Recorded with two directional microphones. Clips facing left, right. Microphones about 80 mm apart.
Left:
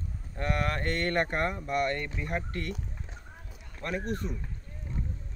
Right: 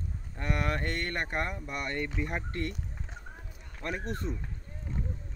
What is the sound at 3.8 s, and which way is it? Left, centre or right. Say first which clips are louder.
Speech: left 2 dB; right.